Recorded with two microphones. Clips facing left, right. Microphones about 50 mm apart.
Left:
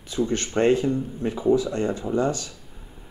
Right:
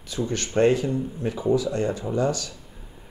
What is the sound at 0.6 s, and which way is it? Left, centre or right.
Speech, left.